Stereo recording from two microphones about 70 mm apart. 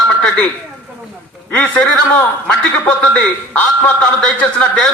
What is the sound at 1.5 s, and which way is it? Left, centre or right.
Speech, left.